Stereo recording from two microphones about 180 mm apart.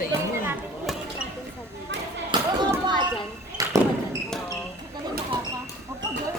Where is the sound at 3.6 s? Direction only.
20° right (ahead or behind).